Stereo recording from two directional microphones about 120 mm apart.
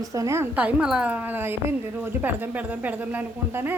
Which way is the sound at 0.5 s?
10° right (ahead or behind).